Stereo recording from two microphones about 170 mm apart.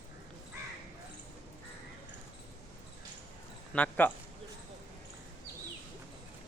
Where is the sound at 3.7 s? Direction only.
10° left (ahead or behind).